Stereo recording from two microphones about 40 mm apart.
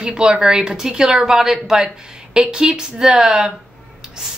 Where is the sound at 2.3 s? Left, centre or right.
Right.